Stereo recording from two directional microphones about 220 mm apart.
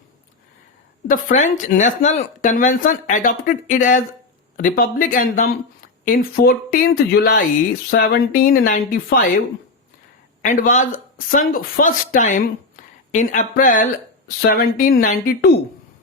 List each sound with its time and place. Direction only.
1.0 s speech: 35° left (ahead or behind)
10.4 s a woman's voice: 35° left (ahead or behind)